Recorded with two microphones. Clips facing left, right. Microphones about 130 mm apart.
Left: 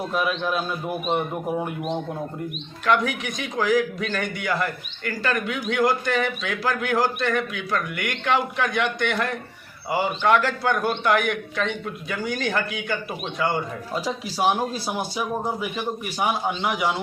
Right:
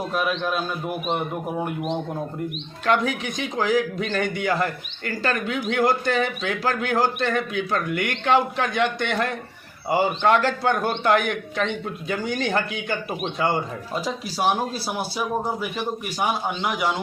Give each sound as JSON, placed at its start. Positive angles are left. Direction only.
{"t": 0.1, "sound": "a man's voice", "side_deg": 0}
{"t": 2.8, "sound": "a man's voice", "side_deg": -30}
{"t": 14.0, "sound": "speech", "side_deg": 10}